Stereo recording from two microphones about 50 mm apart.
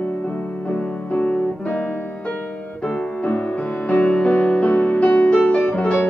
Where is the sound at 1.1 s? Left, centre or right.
Left.